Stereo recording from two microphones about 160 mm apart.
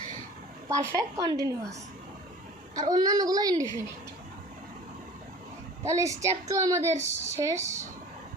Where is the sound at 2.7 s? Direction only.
25° right (ahead or behind).